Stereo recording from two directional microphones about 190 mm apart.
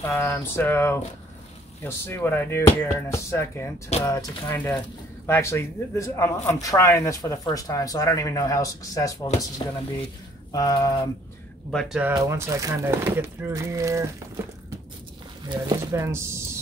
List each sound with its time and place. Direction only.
0.1 s speech: 10° left (ahead or behind)
10.5 s speech: 20° left (ahead or behind)
11.7 s speech: centre (ahead or behind)
12.2 s speech: 15° right (ahead or behind)
15.5 s speech: 20° right (ahead or behind)